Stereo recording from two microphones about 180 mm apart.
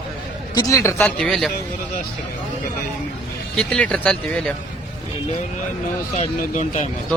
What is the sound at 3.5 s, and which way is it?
Speech, 5° left (ahead or behind).